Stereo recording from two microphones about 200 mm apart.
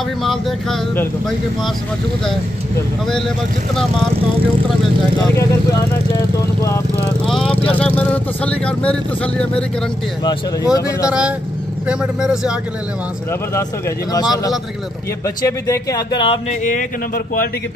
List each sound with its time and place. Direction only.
0.2 s speech: centre (ahead or behind)
5.3 s speech: 15° left (ahead or behind)
7.2 s speech: centre (ahead or behind)
10.2 s speech: 15° left (ahead or behind)
11.1 s speech: 5° right (ahead or behind)
13.3 s speech: 15° left (ahead or behind)
15.2 s speech: 15° left (ahead or behind); by 17.5 s 45° left (ahead or behind)